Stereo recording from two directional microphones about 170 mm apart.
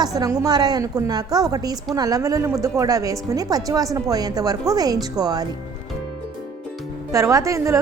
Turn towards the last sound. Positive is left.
turn(degrees=-20)  # may be behind; listen again after turning